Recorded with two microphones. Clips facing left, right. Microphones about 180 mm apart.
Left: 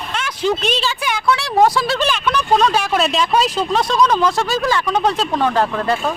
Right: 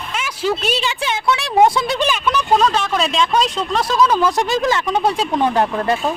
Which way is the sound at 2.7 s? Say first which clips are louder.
Left 2 dB; 5° left (ahead or behind).